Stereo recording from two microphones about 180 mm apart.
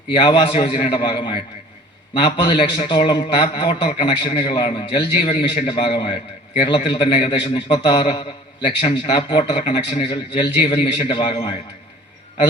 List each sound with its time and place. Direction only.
0.1 s a man's voice: 25° left (ahead or behind)